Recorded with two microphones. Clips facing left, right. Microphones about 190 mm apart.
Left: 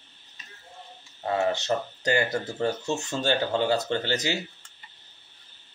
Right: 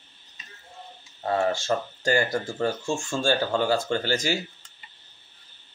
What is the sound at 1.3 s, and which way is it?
Speech, 20° left (ahead or behind).